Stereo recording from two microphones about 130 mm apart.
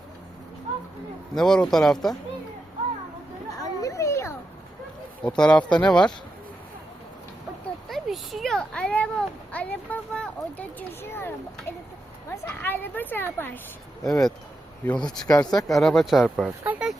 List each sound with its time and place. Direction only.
1.4 s speech: 5° left (ahead or behind)
3.6 s a sound: 25° left (ahead or behind)
5.2 s a woman's voice: 5° left (ahead or behind)
7.9 s a sound: centre (ahead or behind)
10.1 s speech: 10° left (ahead or behind)
12.6 s a woman's voice: 15° left (ahead or behind)
14.0 s speech: 5° left (ahead or behind)
15.3 s speech: 30° left (ahead or behind)
15.6 s speech: centre (ahead or behind)
16.6 s a sound: 10° right (ahead or behind)